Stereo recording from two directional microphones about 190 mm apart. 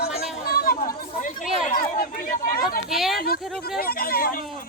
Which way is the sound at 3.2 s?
55° left (ahead or behind).